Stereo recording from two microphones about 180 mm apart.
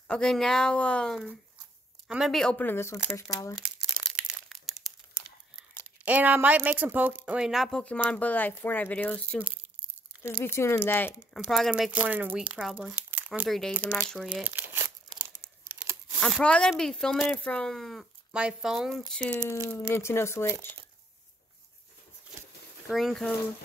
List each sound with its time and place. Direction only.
0.1 s speech: 5° left (ahead or behind)
3.5 s crumpling: centre (ahead or behind)
6.0 s speech: 10° right (ahead or behind); by 9.4 s 5° left (ahead or behind)
10.4 s speech: 15° left (ahead or behind)
11.3 s speech: centre (ahead or behind)
14.4 s crumpling: 10° right (ahead or behind)
16.2 s speech: centre (ahead or behind)
22.8 s speech: centre (ahead or behind)